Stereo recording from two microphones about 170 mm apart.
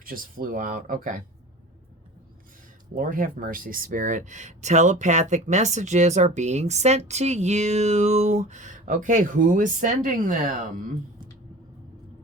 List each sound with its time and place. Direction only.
0.0 s speech: 55° right (ahead or behind)
2.9 s speech: 55° right (ahead or behind)